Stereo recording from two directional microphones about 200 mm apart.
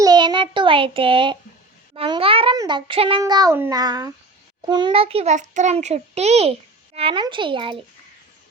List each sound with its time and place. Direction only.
0.0 s child singing: 20° right (ahead or behind)
2.0 s a child's voice: 25° right (ahead or behind)